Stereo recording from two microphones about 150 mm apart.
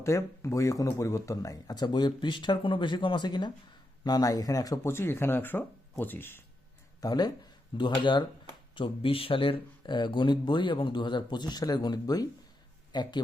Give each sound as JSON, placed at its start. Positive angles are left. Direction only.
{"t": 0.0, "sound": "speech", "side_deg": 20}
{"t": 7.0, "sound": "speech", "side_deg": 25}